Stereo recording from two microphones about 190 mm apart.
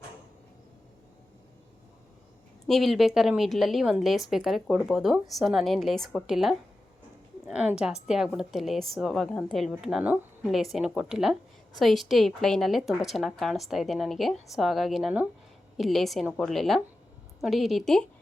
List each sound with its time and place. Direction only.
2.6 s a woman's voice: centre (ahead or behind)
7.4 s a sound: 5° right (ahead or behind)
7.8 s a woman's voice: 5° right (ahead or behind)